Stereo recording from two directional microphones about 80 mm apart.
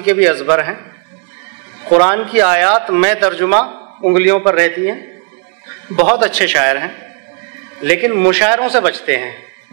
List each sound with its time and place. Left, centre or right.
0.0 s speech: centre